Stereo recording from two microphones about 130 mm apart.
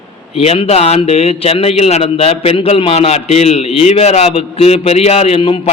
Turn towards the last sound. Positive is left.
turn(degrees=45)  # may be behind; listen again after turning